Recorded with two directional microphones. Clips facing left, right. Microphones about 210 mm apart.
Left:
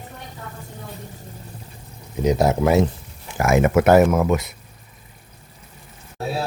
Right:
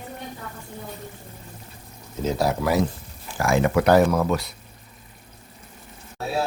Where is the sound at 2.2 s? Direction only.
20° left (ahead or behind).